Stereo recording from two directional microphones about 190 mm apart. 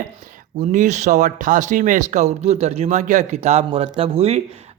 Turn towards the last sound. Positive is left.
turn(degrees=-30)  # may be behind; listen again after turning